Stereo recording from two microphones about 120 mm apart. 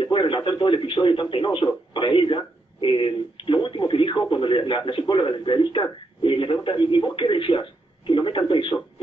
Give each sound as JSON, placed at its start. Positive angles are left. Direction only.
{"t": 0.0, "sound": "speech", "side_deg": 40}